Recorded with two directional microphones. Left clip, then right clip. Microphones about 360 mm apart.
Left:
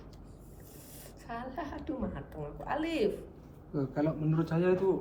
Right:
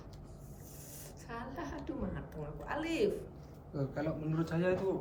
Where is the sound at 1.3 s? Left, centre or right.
Centre.